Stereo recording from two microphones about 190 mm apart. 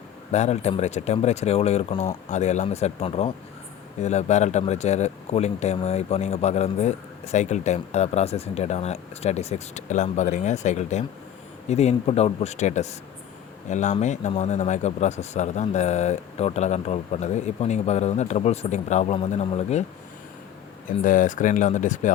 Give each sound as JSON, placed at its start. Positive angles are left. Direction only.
{"t": 0.3, "sound": "a man's voice", "side_deg": 35}
{"t": 20.8, "sound": "a man's voice", "side_deg": 45}